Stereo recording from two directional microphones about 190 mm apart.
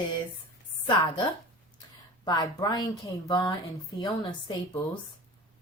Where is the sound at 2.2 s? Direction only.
20° left (ahead or behind).